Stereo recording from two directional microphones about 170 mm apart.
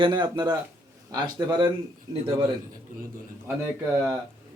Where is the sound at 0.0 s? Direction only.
25° right (ahead or behind).